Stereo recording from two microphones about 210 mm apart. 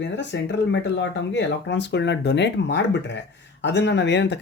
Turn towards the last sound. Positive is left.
turn(degrees=55)  # may be behind; listen again after turning